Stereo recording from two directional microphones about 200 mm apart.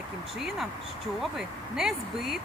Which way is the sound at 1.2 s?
Centre (ahead or behind).